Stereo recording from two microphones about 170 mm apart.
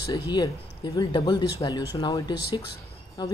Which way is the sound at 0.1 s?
25° left (ahead or behind).